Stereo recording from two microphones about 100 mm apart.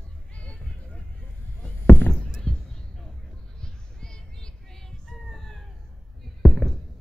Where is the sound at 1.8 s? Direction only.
20° left (ahead or behind).